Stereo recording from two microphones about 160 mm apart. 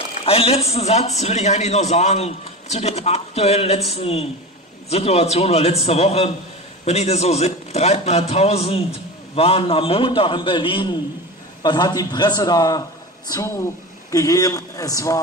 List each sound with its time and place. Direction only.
0.2 s a man's voice: 35° left (ahead or behind); by 15.1 s 20° left (ahead or behind)